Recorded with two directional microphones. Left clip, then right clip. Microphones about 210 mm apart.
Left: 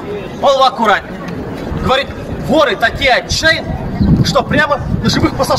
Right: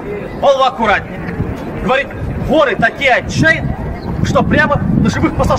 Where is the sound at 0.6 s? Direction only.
15° right (ahead or behind).